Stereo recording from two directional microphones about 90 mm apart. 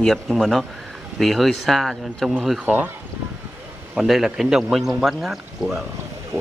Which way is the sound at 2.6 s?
15° right (ahead or behind).